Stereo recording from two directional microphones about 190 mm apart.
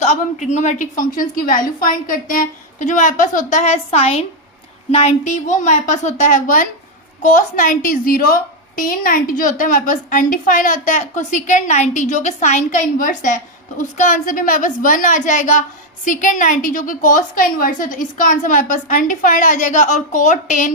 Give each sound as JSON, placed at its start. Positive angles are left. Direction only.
{"t": 0.0, "sound": "a woman's voice", "side_deg": 35}